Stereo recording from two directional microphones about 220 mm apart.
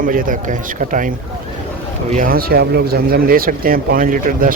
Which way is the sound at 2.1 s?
40° right (ahead or behind).